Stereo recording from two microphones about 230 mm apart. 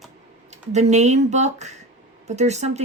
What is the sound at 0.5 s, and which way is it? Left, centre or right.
A woman's voice, right.